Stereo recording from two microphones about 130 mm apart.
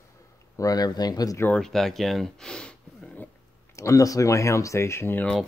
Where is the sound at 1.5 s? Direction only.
5° left (ahead or behind).